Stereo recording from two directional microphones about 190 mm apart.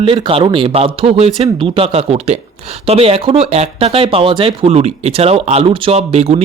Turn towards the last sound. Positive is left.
turn(degrees=-35)  # may be behind; listen again after turning